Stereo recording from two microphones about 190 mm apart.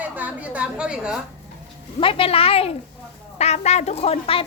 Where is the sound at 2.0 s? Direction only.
30° left (ahead or behind).